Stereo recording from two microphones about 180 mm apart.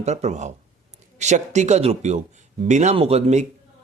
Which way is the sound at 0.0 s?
40° right (ahead or behind).